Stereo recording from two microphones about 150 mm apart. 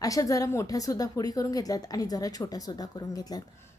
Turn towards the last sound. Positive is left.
turn(degrees=25)  # may be behind; listen again after turning